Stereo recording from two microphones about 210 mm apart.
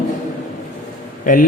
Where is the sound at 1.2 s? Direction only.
40° left (ahead or behind).